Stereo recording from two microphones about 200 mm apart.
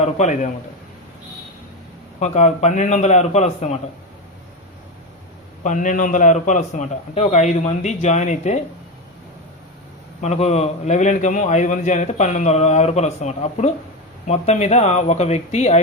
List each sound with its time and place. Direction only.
0.0 s a man's voice: 35° left (ahead or behind)
2.1 s a man's voice: 35° left (ahead or behind)
5.6 s a man's voice: 40° left (ahead or behind)
10.2 s a man's voice: 35° left (ahead or behind)